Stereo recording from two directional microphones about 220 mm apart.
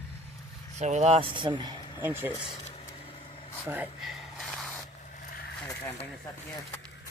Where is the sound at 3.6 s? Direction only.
10° right (ahead or behind).